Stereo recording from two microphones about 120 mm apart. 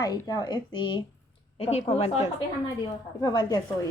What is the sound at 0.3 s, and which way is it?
Speech, 35° left (ahead or behind).